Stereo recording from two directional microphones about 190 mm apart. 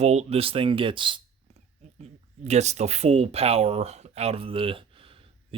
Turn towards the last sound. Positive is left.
turn(degrees=-30)  # may be behind; listen again after turning